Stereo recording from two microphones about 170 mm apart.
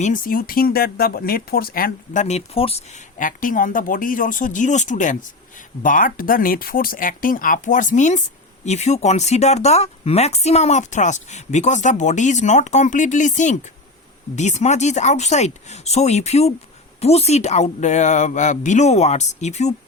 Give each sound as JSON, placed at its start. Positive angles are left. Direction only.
{"t": 0.0, "sound": "speech", "side_deg": 55}
{"t": 2.2, "sound": "speech", "side_deg": 40}
{"t": 3.2, "sound": "speech", "side_deg": 50}